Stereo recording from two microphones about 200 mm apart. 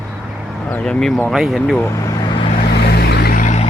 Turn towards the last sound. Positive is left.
turn(degrees=40)  # may be behind; listen again after turning